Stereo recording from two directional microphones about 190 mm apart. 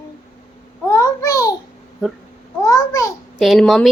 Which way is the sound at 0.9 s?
15° left (ahead or behind).